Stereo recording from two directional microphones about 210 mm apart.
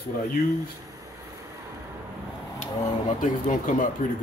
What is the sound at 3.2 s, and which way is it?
Speech, 40° left (ahead or behind).